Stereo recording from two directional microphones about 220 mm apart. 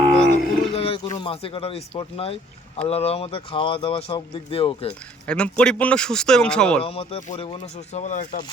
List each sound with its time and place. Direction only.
0.1 s roaring cats: 5° left (ahead or behind)
0.7 s speech: 25° left (ahead or behind)
4.9 s speech: 5° left (ahead or behind)
6.8 s speech: 25° left (ahead or behind)